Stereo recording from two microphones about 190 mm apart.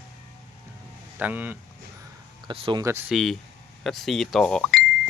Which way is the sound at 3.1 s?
Centre (ahead or behind).